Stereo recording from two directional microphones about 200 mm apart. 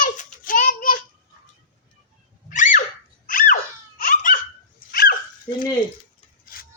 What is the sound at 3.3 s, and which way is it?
Laughter, 45° left (ahead or behind).